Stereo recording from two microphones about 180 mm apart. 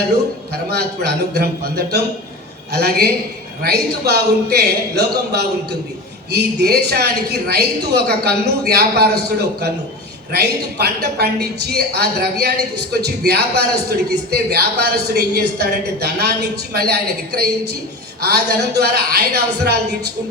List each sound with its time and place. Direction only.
0.7 s a woman's voice: 60° right (ahead or behind)
6.3 s a woman's voice: 65° right (ahead or behind)